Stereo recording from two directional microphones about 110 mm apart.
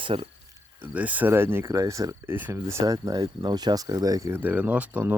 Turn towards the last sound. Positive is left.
turn(degrees=-15)  # may be behind; listen again after turning